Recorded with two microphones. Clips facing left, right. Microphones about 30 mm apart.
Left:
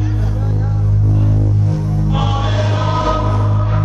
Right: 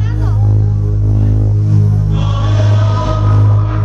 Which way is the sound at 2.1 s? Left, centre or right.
Left.